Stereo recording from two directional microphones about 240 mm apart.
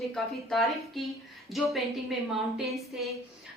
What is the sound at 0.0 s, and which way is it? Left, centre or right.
Speech, centre.